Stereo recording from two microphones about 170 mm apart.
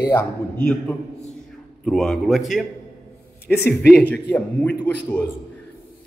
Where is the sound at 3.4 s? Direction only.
10° left (ahead or behind).